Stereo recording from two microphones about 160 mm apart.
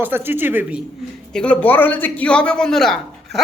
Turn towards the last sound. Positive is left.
turn(degrees=0)  # may be behind; listen again after turning